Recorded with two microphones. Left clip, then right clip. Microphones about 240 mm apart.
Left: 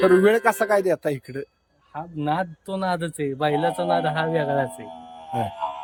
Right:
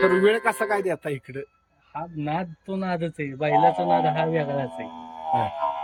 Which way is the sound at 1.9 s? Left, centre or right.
Centre.